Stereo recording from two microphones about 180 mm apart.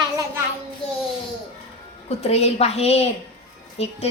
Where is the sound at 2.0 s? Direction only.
35° left (ahead or behind).